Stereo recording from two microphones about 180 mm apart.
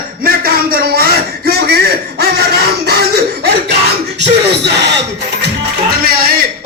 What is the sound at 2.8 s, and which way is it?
A man's voice, 60° right (ahead or behind).